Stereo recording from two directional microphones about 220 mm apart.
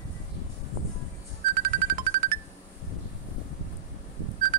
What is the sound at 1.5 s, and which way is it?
Music, 40° right (ahead or behind).